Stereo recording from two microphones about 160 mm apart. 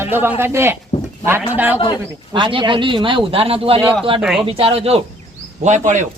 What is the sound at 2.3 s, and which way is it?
A man's voice, 30° right (ahead or behind).